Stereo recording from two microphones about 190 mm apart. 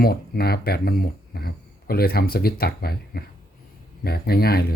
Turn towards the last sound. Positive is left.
turn(degrees=55)  # may be behind; listen again after turning